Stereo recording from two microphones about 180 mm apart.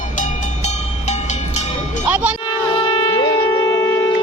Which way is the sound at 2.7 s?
30° left (ahead or behind).